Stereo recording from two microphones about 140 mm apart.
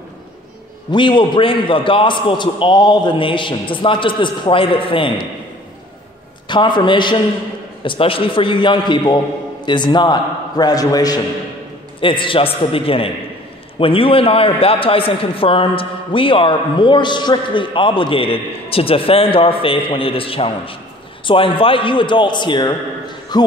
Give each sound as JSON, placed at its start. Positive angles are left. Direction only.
{"t": 0.9, "sound": "a man's voice", "side_deg": 35}
{"t": 6.4, "sound": "a man's voice", "side_deg": 35}